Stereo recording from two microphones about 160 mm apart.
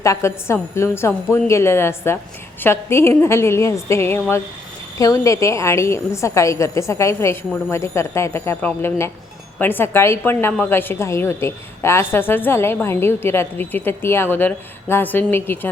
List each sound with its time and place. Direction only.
0.0 s a woman's voice: 20° left (ahead or behind)